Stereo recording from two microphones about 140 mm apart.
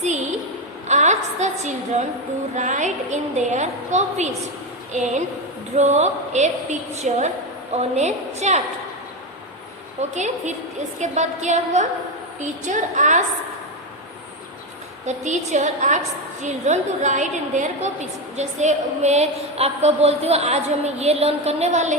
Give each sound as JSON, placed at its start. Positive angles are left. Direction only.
{"t": 0.9, "sound": "a sound", "side_deg": -55}
{"t": 2.6, "sound": "a woman's voice", "side_deg": -60}
{"t": 10.0, "sound": "a woman's voice", "side_deg": -55}
{"t": 15.0, "sound": "a woman's voice", "side_deg": -55}